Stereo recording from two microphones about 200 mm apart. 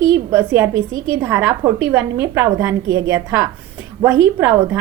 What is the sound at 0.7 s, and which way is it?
Speech, 75° right (ahead or behind).